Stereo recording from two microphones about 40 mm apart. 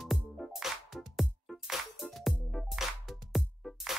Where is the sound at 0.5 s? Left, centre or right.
Centre.